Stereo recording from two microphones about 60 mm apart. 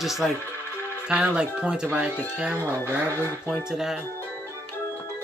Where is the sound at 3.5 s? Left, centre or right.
Centre.